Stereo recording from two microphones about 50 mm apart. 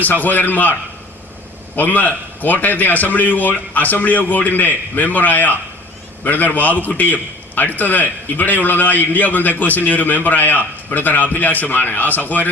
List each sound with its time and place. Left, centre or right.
0.0 s a man's voice: left
1.7 s a man's voice: left